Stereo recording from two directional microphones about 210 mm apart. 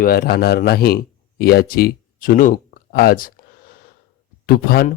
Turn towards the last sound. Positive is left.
turn(degrees=45)  # may be behind; listen again after turning